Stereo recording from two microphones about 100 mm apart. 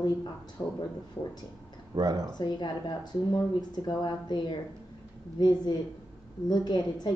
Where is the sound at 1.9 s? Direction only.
40° right (ahead or behind).